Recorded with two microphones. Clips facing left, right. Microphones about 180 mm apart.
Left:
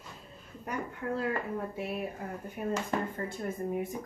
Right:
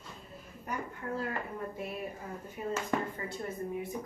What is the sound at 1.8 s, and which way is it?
Speech, 65° left (ahead or behind).